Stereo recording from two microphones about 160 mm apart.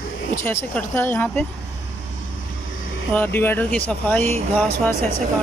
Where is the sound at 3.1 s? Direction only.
10° left (ahead or behind).